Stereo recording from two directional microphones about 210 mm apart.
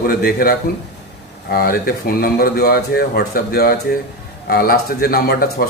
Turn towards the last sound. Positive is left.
turn(degrees=45)  # may be behind; listen again after turning